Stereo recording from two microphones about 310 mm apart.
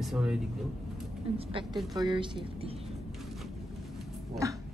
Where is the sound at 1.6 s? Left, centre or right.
Centre.